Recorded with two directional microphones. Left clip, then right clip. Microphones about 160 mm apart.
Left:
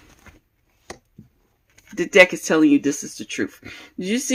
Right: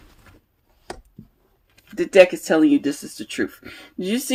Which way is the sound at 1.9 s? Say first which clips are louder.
Even; 40° left (ahead or behind).